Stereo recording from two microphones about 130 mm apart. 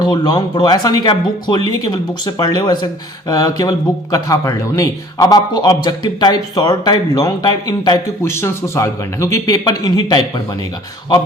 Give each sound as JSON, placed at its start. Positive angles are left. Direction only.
{"t": 0.0, "sound": "speech", "side_deg": 35}
{"t": 8.2, "sound": "a man's voice", "side_deg": 20}